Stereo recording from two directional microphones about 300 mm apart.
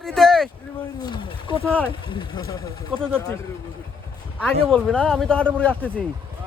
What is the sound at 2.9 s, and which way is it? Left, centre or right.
Speech, centre.